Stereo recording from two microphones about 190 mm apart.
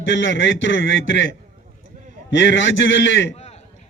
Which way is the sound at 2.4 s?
70° left (ahead or behind).